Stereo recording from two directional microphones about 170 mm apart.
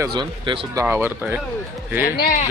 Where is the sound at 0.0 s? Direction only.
25° right (ahead or behind).